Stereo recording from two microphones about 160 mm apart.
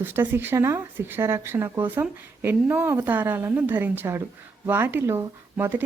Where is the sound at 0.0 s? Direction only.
15° right (ahead or behind).